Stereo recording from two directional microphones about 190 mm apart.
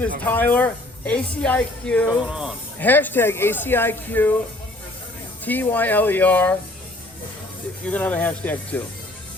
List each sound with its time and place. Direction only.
0.3 s a woman's voice: 10° left (ahead or behind)
2.0 s speech: 5° right (ahead or behind)
2.7 s a woman's voice: 10° left (ahead or behind)
5.5 s a woman's voice: 10° left (ahead or behind)
7.9 s a woman's voice: 5° left (ahead or behind)